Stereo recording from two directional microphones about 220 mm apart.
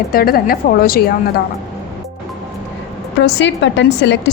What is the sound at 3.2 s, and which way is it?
A woman's voice, 55° left (ahead or behind).